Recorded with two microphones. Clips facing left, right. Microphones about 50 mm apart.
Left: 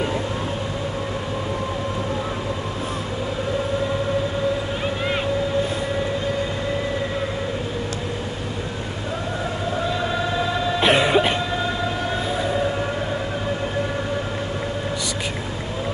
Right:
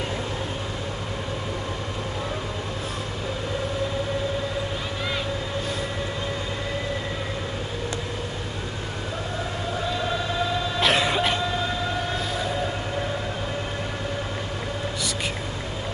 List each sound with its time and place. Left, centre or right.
10.8 s throat clearing: centre